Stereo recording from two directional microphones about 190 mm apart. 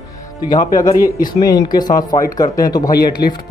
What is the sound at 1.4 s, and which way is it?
Speech, 20° left (ahead or behind).